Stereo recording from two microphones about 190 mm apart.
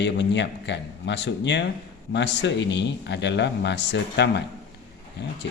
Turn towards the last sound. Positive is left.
turn(degrees=65)  # may be behind; listen again after turning